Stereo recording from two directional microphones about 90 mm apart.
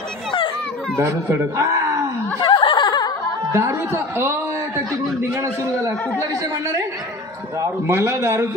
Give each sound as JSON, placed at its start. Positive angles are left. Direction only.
{"t": 0.9, "sound": "a man's voice", "side_deg": -30}
{"t": 2.3, "sound": "snicker", "side_deg": 65}
{"t": 3.5, "sound": "a man's voice", "side_deg": -25}
{"t": 7.6, "sound": "a man's voice", "side_deg": -30}